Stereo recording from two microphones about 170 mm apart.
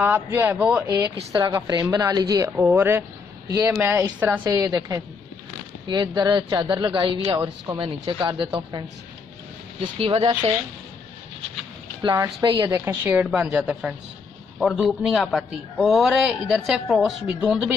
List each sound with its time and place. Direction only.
0.0 s a woman's voice: 15° right (ahead or behind)
1.3 s a woman's voice: 25° right (ahead or behind)
4.6 s speech: 20° right (ahead or behind)
12.0 s a woman's voice: 20° right (ahead or behind); by 17.6 s 5° right (ahead or behind)